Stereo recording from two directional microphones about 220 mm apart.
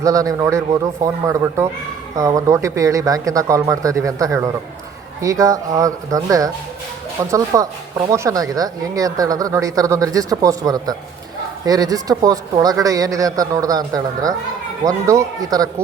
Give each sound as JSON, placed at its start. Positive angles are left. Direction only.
{"t": 0.0, "sound": "speech", "side_deg": -15}